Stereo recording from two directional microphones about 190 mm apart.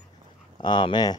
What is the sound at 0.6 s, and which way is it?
Speech, 25° left (ahead or behind).